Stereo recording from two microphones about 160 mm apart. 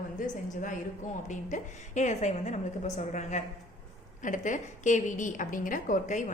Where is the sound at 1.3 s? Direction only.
50° left (ahead or behind).